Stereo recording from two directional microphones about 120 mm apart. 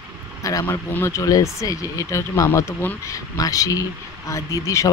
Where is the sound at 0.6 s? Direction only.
20° left (ahead or behind).